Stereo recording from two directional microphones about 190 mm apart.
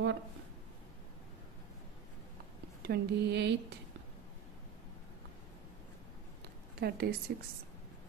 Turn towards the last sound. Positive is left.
turn(degrees=-55)  # may be behind; listen again after turning